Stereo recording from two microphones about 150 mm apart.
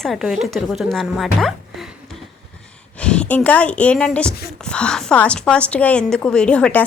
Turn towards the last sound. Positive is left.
turn(degrees=10)  # may be behind; listen again after turning